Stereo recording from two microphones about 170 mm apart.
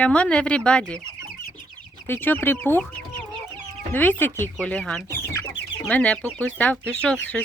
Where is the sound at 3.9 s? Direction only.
10° left (ahead or behind).